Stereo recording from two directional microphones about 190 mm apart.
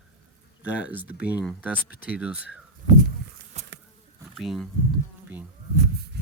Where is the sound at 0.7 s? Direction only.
10° right (ahead or behind).